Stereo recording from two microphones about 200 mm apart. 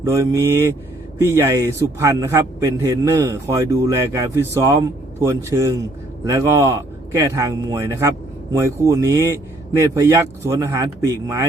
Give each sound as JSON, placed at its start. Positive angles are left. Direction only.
{"t": 0.0, "sound": "a man's voice", "side_deg": -15}